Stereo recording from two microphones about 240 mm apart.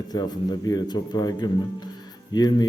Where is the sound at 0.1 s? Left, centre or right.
Centre.